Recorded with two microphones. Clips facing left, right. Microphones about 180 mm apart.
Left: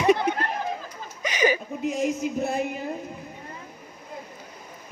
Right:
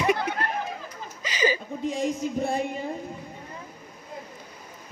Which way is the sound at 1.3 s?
20° left (ahead or behind).